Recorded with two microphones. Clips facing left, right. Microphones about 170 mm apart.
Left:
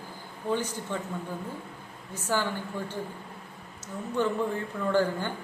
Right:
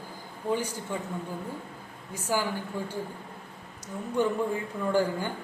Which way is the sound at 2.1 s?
10° right (ahead or behind).